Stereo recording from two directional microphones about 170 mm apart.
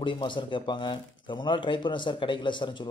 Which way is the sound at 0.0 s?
25° left (ahead or behind).